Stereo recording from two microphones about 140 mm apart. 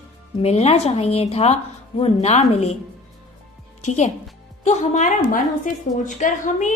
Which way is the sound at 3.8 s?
55° left (ahead or behind).